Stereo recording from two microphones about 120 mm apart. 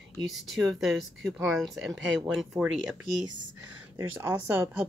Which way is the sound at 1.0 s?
Centre (ahead or behind).